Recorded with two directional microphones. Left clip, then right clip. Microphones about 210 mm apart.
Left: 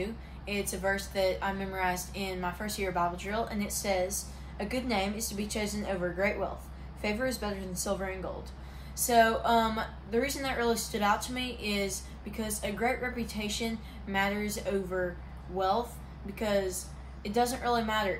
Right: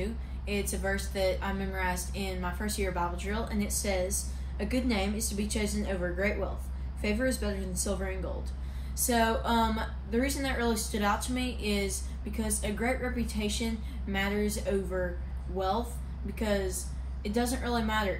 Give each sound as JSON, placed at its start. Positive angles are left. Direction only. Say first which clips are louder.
{"t": 0.0, "sound": "speech", "louder": "left 1 dB", "side_deg": 15}